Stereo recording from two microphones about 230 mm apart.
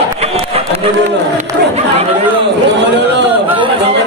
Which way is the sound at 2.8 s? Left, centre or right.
Right.